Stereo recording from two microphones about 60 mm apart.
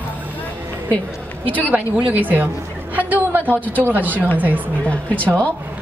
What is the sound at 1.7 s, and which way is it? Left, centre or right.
A woman's voice, right.